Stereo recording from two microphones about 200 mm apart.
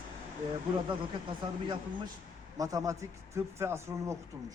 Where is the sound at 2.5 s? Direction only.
15° right (ahead or behind).